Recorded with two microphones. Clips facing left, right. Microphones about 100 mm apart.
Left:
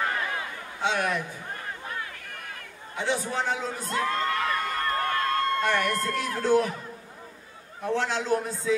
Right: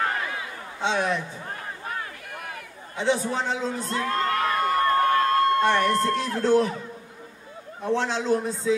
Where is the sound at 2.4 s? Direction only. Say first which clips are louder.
Right 3 dB; 20° right (ahead or behind).